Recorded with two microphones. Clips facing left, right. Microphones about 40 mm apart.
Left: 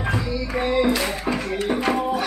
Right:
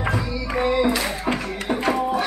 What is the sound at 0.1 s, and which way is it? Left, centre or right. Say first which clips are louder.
Music: even; centre.